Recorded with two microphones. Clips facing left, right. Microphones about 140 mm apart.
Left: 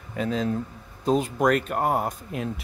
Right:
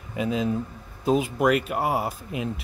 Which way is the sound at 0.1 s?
5° right (ahead or behind).